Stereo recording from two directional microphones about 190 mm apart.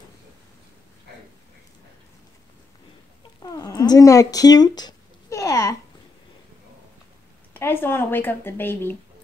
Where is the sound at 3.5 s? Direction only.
20° left (ahead or behind).